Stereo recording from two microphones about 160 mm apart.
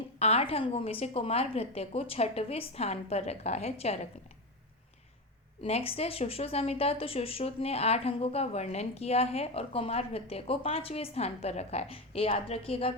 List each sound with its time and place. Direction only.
0.2 s speech: 40° left (ahead or behind)
5.6 s speech: 35° left (ahead or behind)